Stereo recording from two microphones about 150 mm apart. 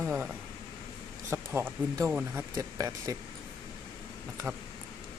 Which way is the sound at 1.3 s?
15° right (ahead or behind).